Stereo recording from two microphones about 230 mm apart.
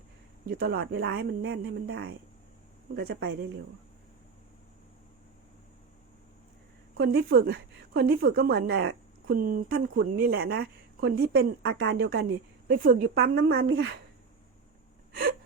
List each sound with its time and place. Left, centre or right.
0.4 s a woman's voice: right
7.0 s a woman's voice: right
15.1 s gasp: right